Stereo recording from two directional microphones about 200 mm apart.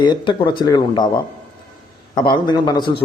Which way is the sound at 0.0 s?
25° left (ahead or behind).